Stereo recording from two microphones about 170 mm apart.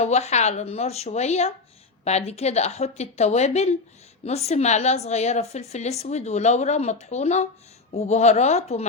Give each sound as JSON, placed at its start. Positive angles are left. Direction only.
{"t": 0.0, "sound": "a woman's voice", "side_deg": 40}